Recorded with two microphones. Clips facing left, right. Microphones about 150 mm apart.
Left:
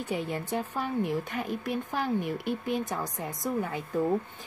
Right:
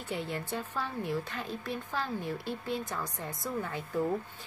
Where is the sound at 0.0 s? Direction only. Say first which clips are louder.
Left 4 dB; 15° left (ahead or behind).